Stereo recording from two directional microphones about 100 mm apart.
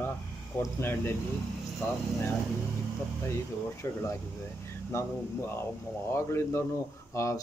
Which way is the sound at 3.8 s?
25° left (ahead or behind).